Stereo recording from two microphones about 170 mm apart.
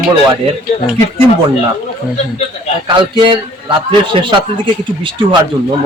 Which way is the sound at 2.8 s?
25° right (ahead or behind).